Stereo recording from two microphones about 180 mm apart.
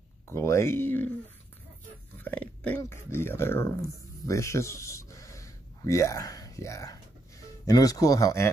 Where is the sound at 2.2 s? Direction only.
10° left (ahead or behind).